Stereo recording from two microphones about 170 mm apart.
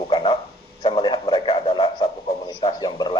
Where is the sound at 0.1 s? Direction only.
30° left (ahead or behind).